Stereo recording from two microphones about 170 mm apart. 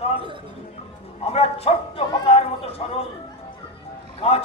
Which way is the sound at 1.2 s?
35° left (ahead or behind).